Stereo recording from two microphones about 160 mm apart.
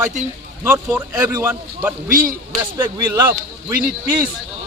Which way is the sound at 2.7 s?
25° right (ahead or behind).